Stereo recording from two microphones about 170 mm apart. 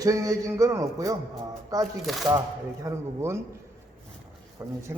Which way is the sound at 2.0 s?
Centre (ahead or behind).